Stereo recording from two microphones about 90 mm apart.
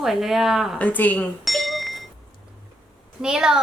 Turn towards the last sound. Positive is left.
turn(degrees=-10)  # may be behind; listen again after turning